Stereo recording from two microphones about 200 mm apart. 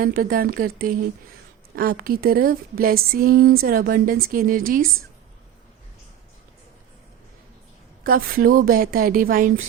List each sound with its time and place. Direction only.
0.0 s speech: 45° right (ahead or behind)
8.0 s speech: 45° right (ahead or behind)